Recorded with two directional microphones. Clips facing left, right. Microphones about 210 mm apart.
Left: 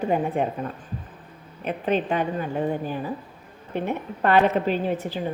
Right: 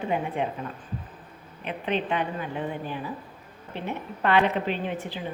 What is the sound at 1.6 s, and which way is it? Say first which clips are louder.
Speech: left 4 dB; 45° left (ahead or behind).